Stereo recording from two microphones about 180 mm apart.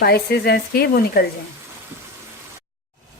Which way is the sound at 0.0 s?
60° left (ahead or behind).